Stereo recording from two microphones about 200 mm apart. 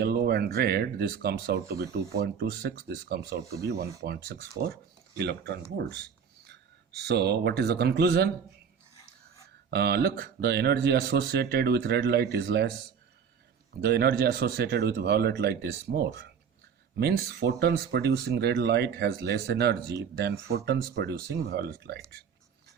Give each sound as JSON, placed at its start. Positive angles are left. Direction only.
{"t": 0.0, "sound": "speech", "side_deg": -50}
{"t": 9.6, "sound": "speech", "side_deg": -55}
{"t": 13.8, "sound": "speech", "side_deg": -55}